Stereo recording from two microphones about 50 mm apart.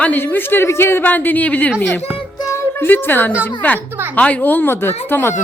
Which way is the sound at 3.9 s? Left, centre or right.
Right.